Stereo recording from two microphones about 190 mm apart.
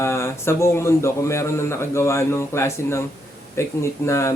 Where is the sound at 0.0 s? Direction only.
15° left (ahead or behind).